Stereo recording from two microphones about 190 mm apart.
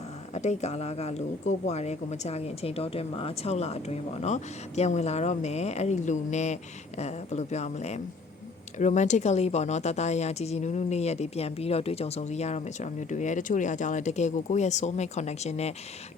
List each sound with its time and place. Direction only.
0.3 s speech: 35° left (ahead or behind)